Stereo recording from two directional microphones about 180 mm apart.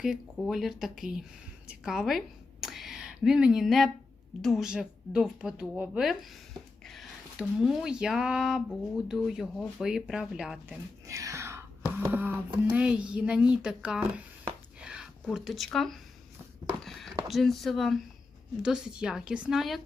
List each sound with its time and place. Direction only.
0.0 s a woman's voice: centre (ahead or behind)
11.0 s whispering: 15° right (ahead or behind)
12.1 s a sound: 10° right (ahead or behind)
12.7 s speech: 5° right (ahead or behind)
14.8 s a sound: 5° right (ahead or behind)
17.2 s speech: centre (ahead or behind)